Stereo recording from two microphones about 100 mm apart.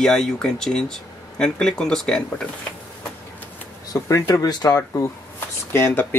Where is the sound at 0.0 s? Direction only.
5° left (ahead or behind).